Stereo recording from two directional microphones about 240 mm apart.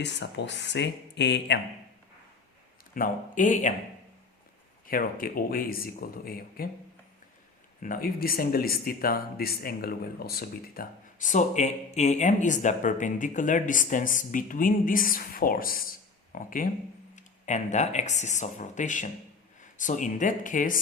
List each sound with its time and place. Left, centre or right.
0.0 s speech: left
2.9 s speech: left
4.9 s speech: left
7.8 s speech: left